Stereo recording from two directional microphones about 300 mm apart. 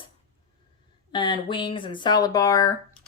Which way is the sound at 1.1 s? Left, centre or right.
Centre.